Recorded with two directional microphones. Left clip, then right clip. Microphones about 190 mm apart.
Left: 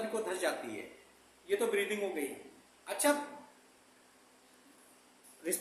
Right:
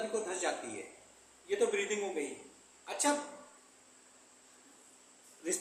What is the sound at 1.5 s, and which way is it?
A woman's voice, 15° left (ahead or behind).